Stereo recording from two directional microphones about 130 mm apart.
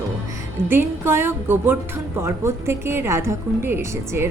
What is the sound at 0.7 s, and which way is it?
Speech, 15° right (ahead or behind).